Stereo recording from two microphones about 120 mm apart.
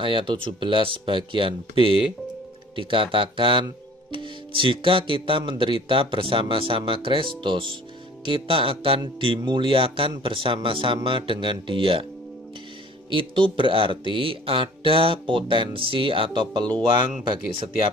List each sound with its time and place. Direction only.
0.0 s speech: 45° right (ahead or behind)
13.1 s speech: 45° right (ahead or behind)